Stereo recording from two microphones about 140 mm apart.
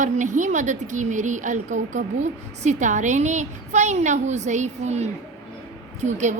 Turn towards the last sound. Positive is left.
turn(degrees=-60)  # may be behind; listen again after turning